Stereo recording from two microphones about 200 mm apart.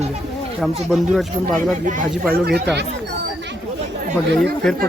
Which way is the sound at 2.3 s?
50° right (ahead or behind).